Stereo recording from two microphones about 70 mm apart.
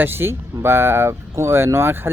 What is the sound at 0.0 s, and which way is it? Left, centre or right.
Speech, right.